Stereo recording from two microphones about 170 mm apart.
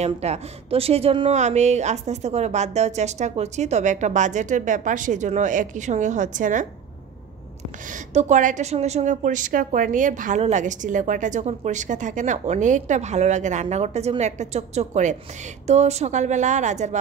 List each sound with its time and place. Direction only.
0.0 s a woman's voice: 40° right (ahead or behind)
8.1 s a woman's voice: 45° right (ahead or behind)